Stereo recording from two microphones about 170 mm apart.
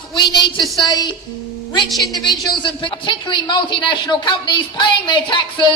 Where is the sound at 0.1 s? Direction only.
25° left (ahead or behind).